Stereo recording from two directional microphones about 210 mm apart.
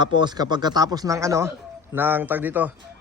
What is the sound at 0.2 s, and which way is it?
A man's voice, 20° right (ahead or behind).